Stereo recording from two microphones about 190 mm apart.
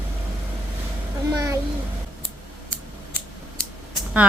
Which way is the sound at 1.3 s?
20° right (ahead or behind).